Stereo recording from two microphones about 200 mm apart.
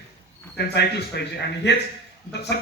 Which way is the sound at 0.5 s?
55° left (ahead or behind).